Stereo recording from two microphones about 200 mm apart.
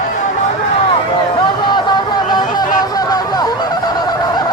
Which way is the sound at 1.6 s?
20° left (ahead or behind).